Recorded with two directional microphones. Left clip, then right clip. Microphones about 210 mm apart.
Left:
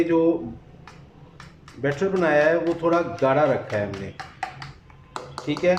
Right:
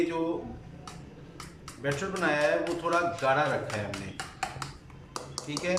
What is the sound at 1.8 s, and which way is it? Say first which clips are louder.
A man's voice: left 8 dB; 35° left (ahead or behind).